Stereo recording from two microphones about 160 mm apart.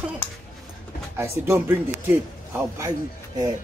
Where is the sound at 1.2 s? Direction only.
15° right (ahead or behind).